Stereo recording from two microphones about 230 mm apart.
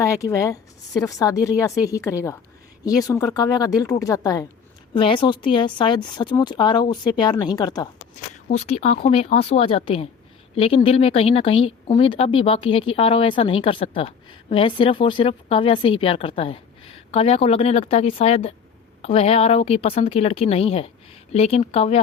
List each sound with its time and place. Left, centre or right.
0.0 s a woman's voice: centre
8.4 s speech: left